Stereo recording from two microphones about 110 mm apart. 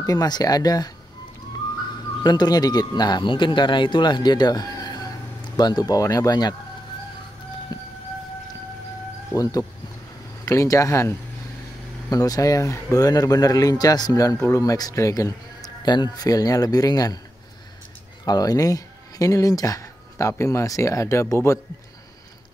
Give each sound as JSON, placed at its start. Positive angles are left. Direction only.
{"t": 0.0, "sound": "speech", "side_deg": 35}
{"t": 2.2, "sound": "speech", "side_deg": 40}
{"t": 9.3, "sound": "speech", "side_deg": 35}
{"t": 18.2, "sound": "speech", "side_deg": 35}